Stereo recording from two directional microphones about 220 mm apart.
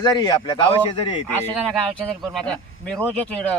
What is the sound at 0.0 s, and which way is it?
Speech, 20° left (ahead or behind).